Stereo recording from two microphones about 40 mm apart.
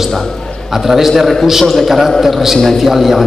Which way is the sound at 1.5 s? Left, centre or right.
Centre.